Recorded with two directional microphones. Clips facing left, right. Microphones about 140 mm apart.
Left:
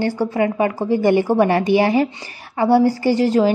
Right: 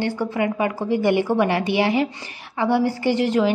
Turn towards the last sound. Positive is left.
turn(degrees=35)  # may be behind; listen again after turning